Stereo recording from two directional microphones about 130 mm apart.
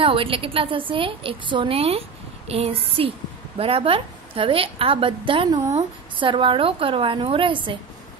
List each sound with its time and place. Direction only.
0.0 s a woman's voice: 45° right (ahead or behind)